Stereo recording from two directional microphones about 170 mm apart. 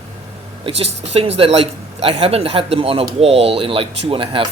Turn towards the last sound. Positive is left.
turn(degrees=-30)  # may be behind; listen again after turning